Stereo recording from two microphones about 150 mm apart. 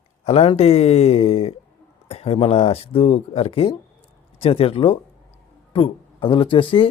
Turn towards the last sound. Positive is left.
turn(degrees=35)  # may be behind; listen again after turning